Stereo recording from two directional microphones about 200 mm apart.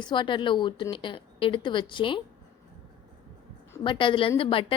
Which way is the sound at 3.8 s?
25° left (ahead or behind).